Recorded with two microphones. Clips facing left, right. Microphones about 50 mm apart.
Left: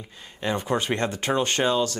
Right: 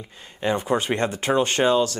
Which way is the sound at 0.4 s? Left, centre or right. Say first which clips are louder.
Right 3 dB; right.